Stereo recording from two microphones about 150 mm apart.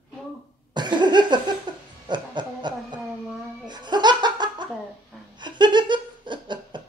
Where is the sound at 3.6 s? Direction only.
30° right (ahead or behind).